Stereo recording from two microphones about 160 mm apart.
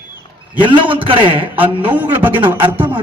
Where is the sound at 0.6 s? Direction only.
30° right (ahead or behind).